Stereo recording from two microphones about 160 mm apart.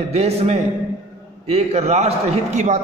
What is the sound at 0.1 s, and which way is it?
A man's voice, 40° right (ahead or behind).